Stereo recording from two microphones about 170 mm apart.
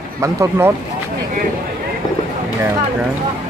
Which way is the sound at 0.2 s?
15° right (ahead or behind).